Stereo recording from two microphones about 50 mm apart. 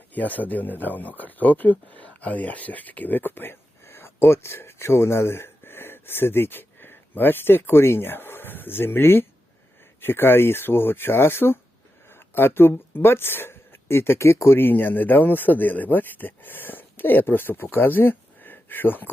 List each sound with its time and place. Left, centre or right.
0.1 s speech: left